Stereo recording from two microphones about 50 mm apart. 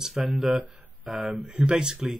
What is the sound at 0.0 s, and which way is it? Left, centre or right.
Speech, centre.